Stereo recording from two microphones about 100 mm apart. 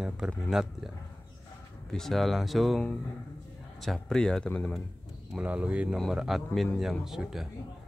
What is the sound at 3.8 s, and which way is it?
Speech, 5° left (ahead or behind).